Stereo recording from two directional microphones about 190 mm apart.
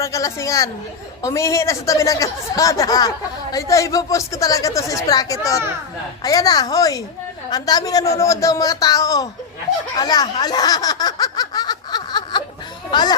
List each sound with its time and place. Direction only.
0.0 s a man's voice: 15° left (ahead or behind)
10.0 s a sound: 20° left (ahead or behind)
12.9 s speech: 20° left (ahead or behind)